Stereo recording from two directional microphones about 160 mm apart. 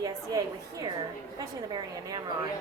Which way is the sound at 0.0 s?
25° right (ahead or behind).